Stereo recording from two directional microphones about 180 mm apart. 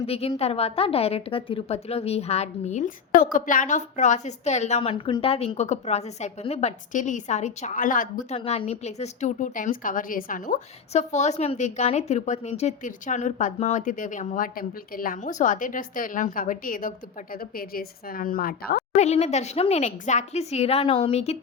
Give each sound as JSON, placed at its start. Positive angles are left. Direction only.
{"t": 0.0, "sound": "a woman's voice", "side_deg": 30}
{"t": 8.4, "sound": "a woman's voice", "side_deg": 35}
{"t": 18.9, "sound": "a woman's voice", "side_deg": 35}